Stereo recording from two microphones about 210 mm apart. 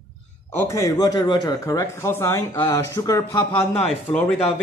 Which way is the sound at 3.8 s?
Centre (ahead or behind).